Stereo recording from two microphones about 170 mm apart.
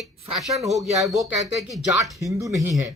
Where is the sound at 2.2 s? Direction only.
20° right (ahead or behind).